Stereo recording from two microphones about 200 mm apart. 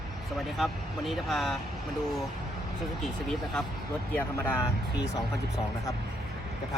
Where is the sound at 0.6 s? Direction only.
Centre (ahead or behind).